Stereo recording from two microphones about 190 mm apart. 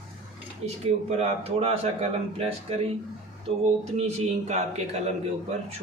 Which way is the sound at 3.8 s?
35° right (ahead or behind).